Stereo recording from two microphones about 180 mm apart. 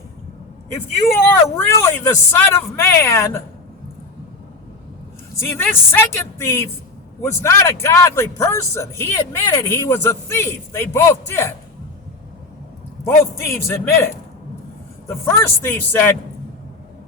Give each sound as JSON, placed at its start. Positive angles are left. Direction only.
{"t": 1.2, "sound": "a man's voice", "side_deg": 15}
{"t": 5.4, "sound": "a man's voice", "side_deg": 15}
{"t": 13.1, "sound": "a man's voice", "side_deg": 15}